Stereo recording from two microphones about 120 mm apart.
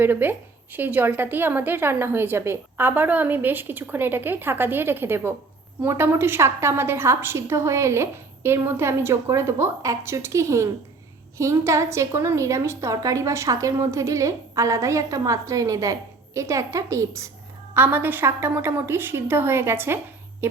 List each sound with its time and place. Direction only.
0.0 s a woman's voice: 15° right (ahead or behind)